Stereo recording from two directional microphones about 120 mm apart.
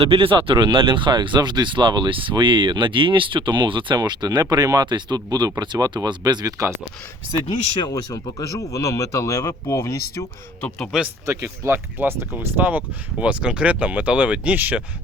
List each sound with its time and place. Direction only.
0.0 s speech: 50° right (ahead or behind); by 6.7 s 30° right (ahead or behind)
7.9 s speech: 30° left (ahead or behind)
11.3 s speech: 25° right (ahead or behind)